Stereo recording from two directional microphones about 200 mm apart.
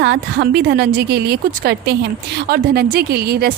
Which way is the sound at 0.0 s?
60° right (ahead or behind).